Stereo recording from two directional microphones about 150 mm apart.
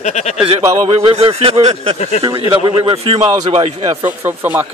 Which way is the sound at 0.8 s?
35° right (ahead or behind).